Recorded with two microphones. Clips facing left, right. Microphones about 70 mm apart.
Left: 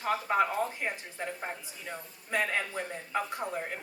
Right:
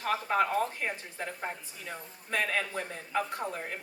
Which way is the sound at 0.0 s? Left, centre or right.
Left.